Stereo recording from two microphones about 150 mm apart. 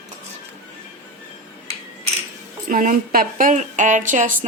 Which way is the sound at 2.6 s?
65° right (ahead or behind).